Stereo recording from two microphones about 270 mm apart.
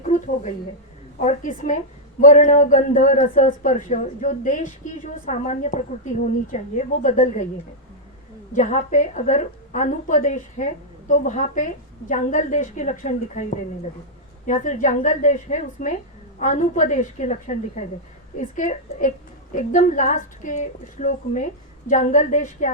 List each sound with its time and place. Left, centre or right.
0.0 s a sound: left
1.2 s a woman's voice: left
8.5 s a woman's voice: left
14.4 s a woman's voice: left